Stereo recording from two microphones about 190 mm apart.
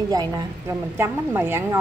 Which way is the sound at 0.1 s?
20° right (ahead or behind).